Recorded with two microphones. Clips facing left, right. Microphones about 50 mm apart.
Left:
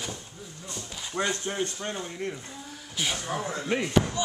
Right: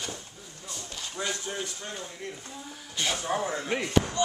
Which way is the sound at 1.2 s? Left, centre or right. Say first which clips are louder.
Left 5 dB; left.